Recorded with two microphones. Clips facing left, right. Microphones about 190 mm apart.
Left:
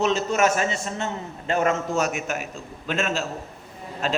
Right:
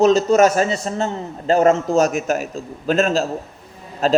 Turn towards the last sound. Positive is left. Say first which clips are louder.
# right 10 dB
turn(degrees=-35)  # may be behind; listen again after turning